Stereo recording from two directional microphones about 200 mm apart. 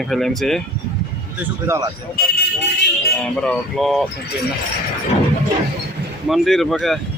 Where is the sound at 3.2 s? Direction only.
5° left (ahead or behind).